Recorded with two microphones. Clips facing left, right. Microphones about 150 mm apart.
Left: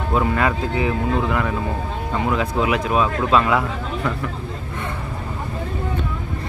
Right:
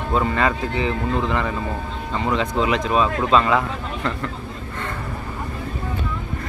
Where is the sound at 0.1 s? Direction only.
5° left (ahead or behind).